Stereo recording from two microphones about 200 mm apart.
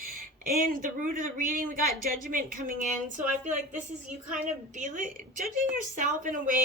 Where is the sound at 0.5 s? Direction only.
45° right (ahead or behind).